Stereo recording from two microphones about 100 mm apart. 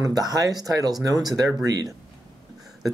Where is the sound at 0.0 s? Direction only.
40° right (ahead or behind).